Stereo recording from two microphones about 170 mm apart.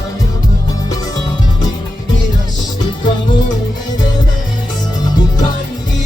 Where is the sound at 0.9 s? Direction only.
20° left (ahead or behind).